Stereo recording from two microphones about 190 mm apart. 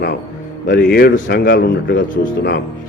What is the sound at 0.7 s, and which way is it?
A man's voice, 55° left (ahead or behind).